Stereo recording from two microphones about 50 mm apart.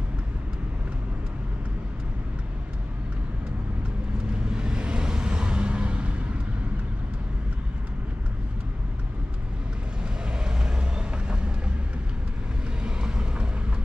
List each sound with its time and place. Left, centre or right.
4.3 s vehicle: centre
10.4 s vehicle: centre
12.8 s vehicle: right